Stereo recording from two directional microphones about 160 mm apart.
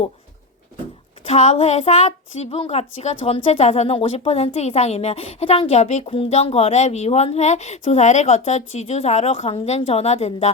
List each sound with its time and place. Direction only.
1.3 s speech: 45° left (ahead or behind)